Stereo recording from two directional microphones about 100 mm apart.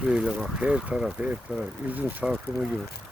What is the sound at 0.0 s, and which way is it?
Speech, 5° right (ahead or behind).